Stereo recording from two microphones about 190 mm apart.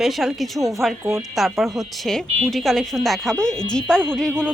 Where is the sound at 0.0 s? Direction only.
Centre (ahead or behind).